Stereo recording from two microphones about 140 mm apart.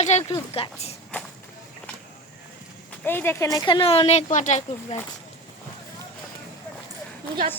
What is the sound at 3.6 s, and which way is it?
Speech, 40° left (ahead or behind).